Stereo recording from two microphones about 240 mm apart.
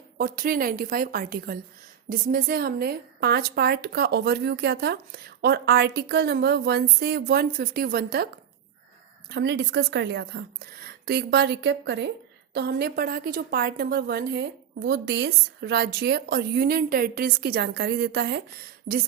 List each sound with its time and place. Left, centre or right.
0.2 s speech: right
9.3 s a woman's voice: right